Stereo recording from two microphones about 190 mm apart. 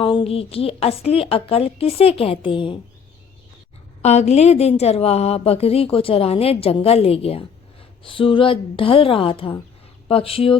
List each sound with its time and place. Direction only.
0.0 s a woman's voice: 25° left (ahead or behind)
4.0 s a woman's voice: 35° left (ahead or behind)